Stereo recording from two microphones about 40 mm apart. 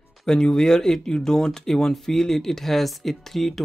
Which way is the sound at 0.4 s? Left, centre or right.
Centre.